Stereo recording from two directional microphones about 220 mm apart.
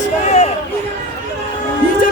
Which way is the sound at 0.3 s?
30° left (ahead or behind).